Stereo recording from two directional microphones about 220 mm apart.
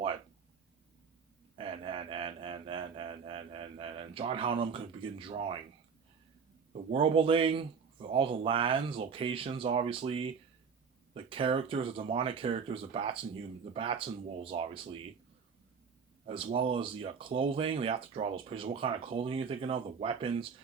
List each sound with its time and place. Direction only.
1.5 s a sound: 25° right (ahead or behind)
6.9 s speech: 25° right (ahead or behind)
16.2 s speech: 25° right (ahead or behind)